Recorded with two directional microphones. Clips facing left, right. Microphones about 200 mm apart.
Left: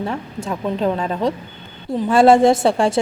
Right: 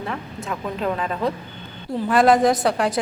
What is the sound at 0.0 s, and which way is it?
A woman's voice, 25° left (ahead or behind).